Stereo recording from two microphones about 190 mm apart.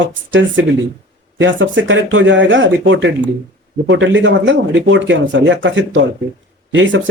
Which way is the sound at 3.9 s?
70° right (ahead or behind).